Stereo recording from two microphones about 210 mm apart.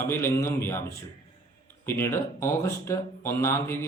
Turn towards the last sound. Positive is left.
turn(degrees=10)  # may be behind; listen again after turning